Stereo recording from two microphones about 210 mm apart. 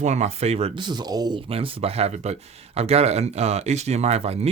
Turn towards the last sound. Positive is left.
turn(degrees=-30)  # may be behind; listen again after turning